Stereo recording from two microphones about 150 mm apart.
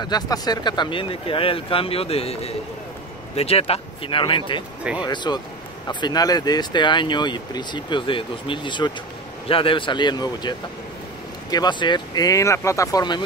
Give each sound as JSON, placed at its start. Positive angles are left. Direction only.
{"t": 0.0, "sound": "speech", "side_deg": 25}
{"t": 11.5, "sound": "speech", "side_deg": 30}